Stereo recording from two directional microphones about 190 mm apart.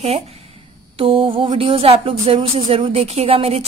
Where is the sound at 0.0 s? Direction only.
35° right (ahead or behind).